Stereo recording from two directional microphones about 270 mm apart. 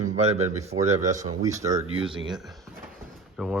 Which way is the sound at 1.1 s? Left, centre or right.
Centre.